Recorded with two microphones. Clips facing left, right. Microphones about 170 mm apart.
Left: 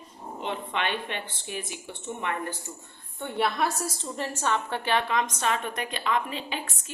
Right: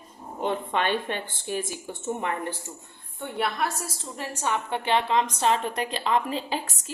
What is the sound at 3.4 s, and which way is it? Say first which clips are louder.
A woman's voice: left 2 dB; 5° right (ahead or behind).